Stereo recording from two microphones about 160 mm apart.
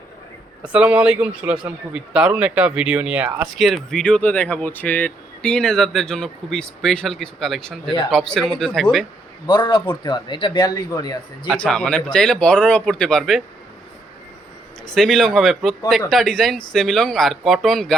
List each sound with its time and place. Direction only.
0.7 s a man's voice: 10° right (ahead or behind)
3.6 s speech: centre (ahead or behind)
9.5 s a man's voice: 30° left (ahead or behind)
11.4 s speech: 5° left (ahead or behind)
14.9 s speech: centre (ahead or behind)